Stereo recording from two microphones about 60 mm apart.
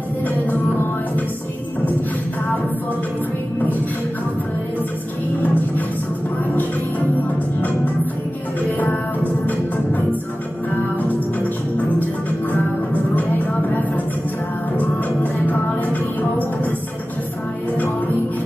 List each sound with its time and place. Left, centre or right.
0.5 s music: left
5.4 s music: left
8.5 s music: left
12.9 s music: left
15.4 s music: left